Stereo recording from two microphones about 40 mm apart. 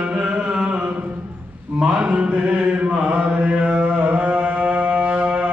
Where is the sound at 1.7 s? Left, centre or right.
Centre.